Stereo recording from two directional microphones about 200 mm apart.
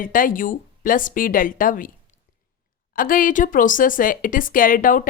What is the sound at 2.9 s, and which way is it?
A woman's voice, 45° left (ahead or behind).